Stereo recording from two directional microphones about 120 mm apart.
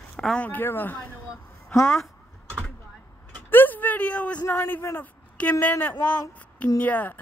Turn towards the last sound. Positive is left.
turn(degrees=15)  # may be behind; listen again after turning